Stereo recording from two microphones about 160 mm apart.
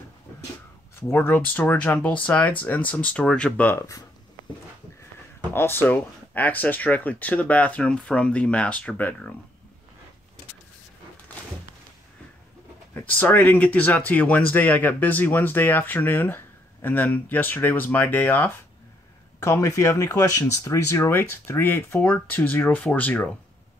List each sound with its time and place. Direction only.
1.0 s speech: 15° left (ahead or behind)
5.5 s speech: 15° left (ahead or behind)
12.9 s speech: 10° left (ahead or behind)